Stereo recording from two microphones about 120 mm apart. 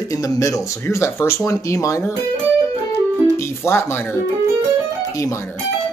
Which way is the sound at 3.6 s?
20° left (ahead or behind).